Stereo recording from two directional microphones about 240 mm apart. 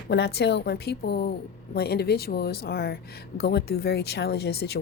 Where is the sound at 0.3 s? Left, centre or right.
Left.